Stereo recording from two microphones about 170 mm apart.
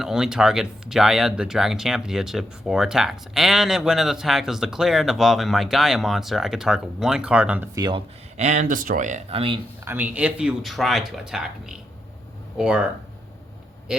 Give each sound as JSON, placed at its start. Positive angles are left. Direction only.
{"t": 0.0, "sound": "speech", "side_deg": -5}
{"t": 7.8, "sound": "speech", "side_deg": -25}
{"t": 8.4, "sound": "speech", "side_deg": -45}
{"t": 9.8, "sound": "speech", "side_deg": -10}